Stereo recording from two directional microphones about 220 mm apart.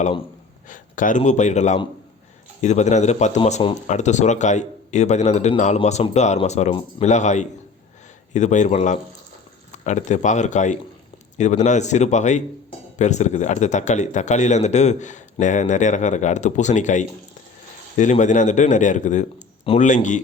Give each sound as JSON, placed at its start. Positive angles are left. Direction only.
{"t": 0.7, "sound": "speech", "side_deg": 35}